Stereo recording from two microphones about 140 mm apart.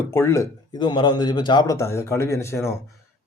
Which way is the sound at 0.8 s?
35° left (ahead or behind).